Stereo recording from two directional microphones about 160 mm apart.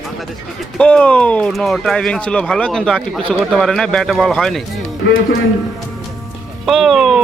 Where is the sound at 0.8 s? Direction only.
10° left (ahead or behind).